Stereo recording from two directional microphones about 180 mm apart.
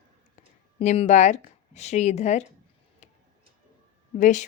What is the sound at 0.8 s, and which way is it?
A woman's voice, 35° left (ahead or behind).